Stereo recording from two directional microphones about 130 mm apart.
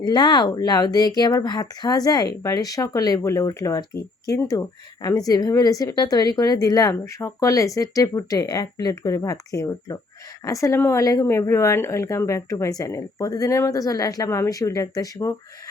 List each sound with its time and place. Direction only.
0.0 s speech: 35° left (ahead or behind)